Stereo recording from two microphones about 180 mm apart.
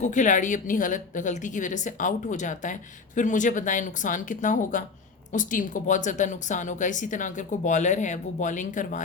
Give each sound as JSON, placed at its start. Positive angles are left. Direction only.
{"t": 0.0, "sound": "speech", "side_deg": 45}